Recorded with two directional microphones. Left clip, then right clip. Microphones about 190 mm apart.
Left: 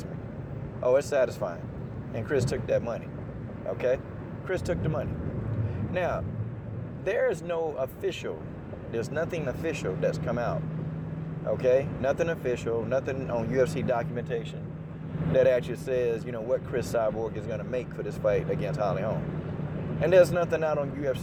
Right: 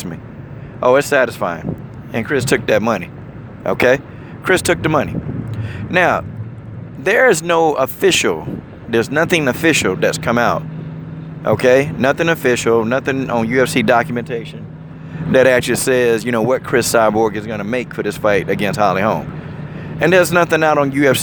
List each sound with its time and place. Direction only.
0.8 s speech: 40° right (ahead or behind)